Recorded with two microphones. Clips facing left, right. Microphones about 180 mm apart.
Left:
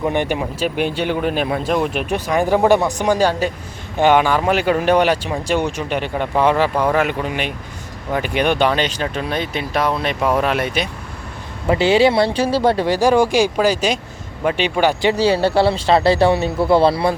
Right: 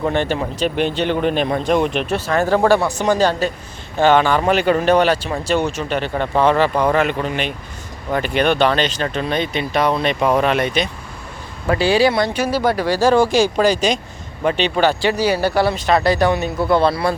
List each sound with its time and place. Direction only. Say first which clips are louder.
0.0 s speech: even; 15° left (ahead or behind)
11.6 s speech: left 1 dB; 20° left (ahead or behind)
15.1 s speech: left 2 dB; 30° left (ahead or behind)